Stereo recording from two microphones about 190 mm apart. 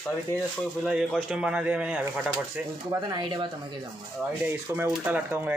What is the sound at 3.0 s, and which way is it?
Speech, 25° right (ahead or behind).